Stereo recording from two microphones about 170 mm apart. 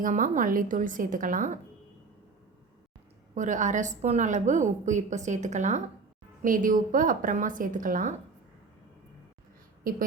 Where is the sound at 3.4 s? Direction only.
45° right (ahead or behind).